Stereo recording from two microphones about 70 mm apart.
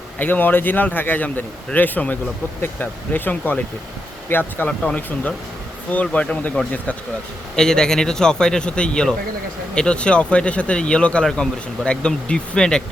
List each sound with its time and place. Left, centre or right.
0.2 s speech: left
5.9 s speech: centre
7.5 s speech: centre